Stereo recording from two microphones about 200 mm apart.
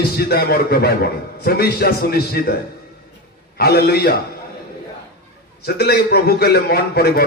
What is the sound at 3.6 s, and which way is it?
Speech, 50° left (ahead or behind).